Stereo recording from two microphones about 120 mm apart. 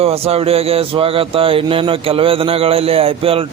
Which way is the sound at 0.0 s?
55° right (ahead or behind).